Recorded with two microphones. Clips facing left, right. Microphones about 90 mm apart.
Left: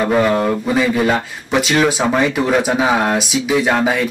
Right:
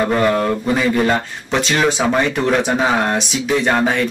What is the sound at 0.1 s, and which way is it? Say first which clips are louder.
Speech: left 1 dB; 5° left (ahead or behind).